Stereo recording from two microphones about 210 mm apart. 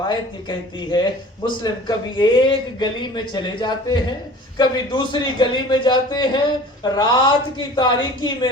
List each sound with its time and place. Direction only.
0.1 s a man's voice: 20° left (ahead or behind)